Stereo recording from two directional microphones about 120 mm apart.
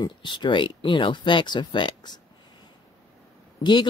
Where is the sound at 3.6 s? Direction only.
35° left (ahead or behind).